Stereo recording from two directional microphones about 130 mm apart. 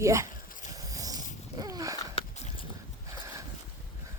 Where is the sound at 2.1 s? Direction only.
45° left (ahead or behind).